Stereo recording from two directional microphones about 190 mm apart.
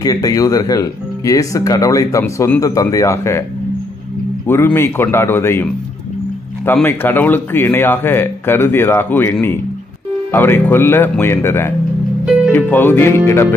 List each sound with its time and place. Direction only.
0.0 s speech: 20° left (ahead or behind)
4.5 s speech: 10° left (ahead or behind)